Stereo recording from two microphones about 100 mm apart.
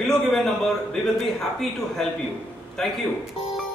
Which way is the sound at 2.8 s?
5° left (ahead or behind).